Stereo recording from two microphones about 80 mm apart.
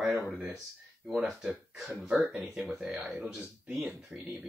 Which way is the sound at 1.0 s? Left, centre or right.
Centre.